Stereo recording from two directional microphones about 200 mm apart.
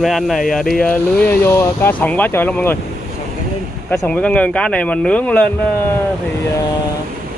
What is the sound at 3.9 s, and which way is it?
Speech, 5° left (ahead or behind).